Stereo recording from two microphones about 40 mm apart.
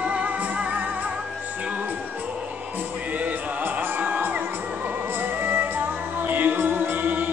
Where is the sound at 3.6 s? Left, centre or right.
Right.